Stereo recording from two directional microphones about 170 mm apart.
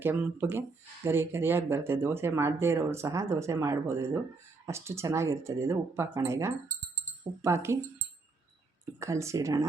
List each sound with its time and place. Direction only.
0.0 s speech: 10° right (ahead or behind)
9.0 s speech: 15° right (ahead or behind)